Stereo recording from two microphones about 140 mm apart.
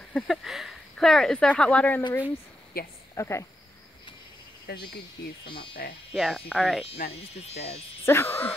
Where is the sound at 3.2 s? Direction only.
20° left (ahead or behind).